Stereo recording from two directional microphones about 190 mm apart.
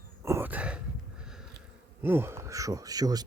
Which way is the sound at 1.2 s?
5° right (ahead or behind).